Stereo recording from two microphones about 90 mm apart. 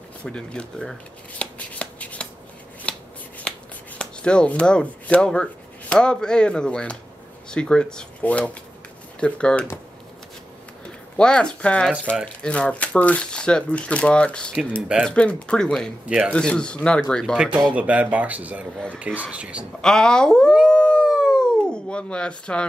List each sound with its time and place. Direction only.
0.2 s speech: 10° left (ahead or behind)
1.4 s shuffling cards: 15° left (ahead or behind)
4.0 s speech: 10° left (ahead or behind)
11.1 s speech: 10° left (ahead or behind)
14.8 s speech: 10° right (ahead or behind)
15.0 s speech: 10° left (ahead or behind)
17.7 s speech: 15° right (ahead or behind)
19.8 s speech: 5° left (ahead or behind)
20.7 s howl: 10° left (ahead or behind)
21.1 s a sound: centre (ahead or behind)